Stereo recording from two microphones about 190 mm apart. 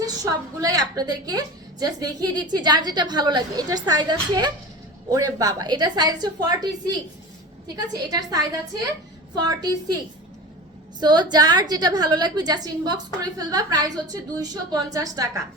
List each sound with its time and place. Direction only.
0.0 s a woman's voice: 20° right (ahead or behind)
7.9 s a woman's voice: 20° right (ahead or behind)
11.0 s a woman's voice: 20° right (ahead or behind)